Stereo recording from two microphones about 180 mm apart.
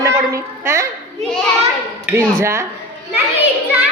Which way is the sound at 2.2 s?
15° right (ahead or behind).